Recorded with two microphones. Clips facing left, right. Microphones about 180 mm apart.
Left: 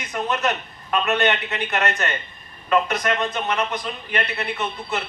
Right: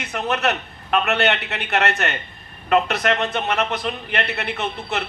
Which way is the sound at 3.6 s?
70° right (ahead or behind).